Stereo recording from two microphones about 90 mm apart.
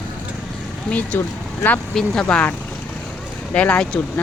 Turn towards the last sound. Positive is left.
turn(degrees=15)  # may be behind; listen again after turning